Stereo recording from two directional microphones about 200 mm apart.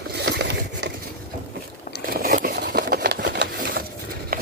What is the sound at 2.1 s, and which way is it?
Sewing machine, 45° right (ahead or behind).